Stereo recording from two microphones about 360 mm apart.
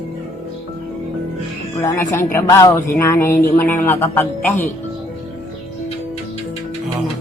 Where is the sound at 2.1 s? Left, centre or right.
Centre.